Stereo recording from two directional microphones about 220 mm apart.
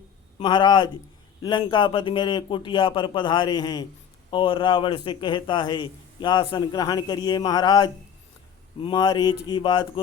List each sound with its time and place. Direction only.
0.3 s a man's voice: 20° left (ahead or behind)